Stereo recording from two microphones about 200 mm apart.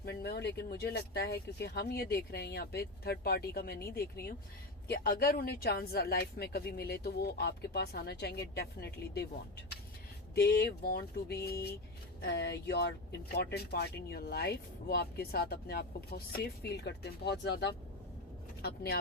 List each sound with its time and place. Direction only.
0.0 s speech: 55° left (ahead or behind)
10.3 s speech: 55° left (ahead or behind)